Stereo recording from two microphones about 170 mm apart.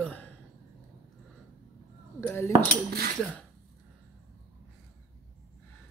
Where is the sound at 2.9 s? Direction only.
70° right (ahead or behind).